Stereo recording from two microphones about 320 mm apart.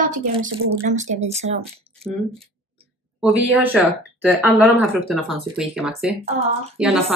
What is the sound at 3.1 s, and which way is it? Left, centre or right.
Speech, centre.